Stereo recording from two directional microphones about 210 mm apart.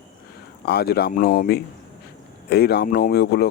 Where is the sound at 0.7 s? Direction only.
50° left (ahead or behind).